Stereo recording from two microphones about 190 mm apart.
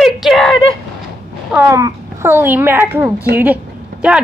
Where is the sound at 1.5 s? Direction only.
15° right (ahead or behind).